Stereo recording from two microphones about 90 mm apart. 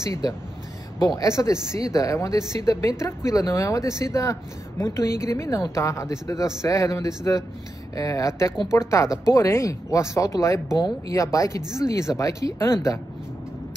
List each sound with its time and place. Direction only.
0.0 s speech: 35° left (ahead or behind)